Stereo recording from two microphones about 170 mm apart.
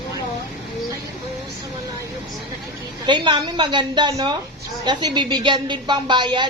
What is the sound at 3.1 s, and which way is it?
A woman's voice, 25° right (ahead or behind).